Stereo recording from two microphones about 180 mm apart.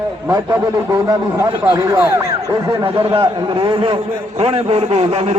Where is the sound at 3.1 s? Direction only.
25° right (ahead or behind).